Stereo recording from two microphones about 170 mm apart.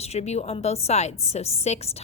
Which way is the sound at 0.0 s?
40° left (ahead or behind).